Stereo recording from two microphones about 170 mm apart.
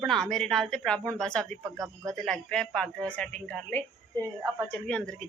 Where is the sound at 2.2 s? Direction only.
5° left (ahead or behind).